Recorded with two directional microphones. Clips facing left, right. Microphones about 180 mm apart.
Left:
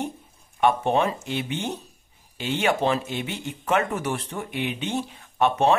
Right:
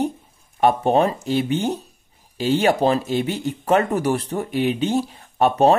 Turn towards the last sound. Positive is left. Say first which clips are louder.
# right 5 dB
turn(degrees=-35)  # may be behind; listen again after turning